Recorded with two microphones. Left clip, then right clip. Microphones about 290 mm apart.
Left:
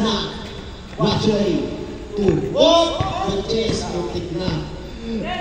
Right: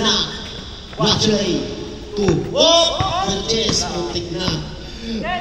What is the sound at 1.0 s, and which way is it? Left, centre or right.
A man's voice, right.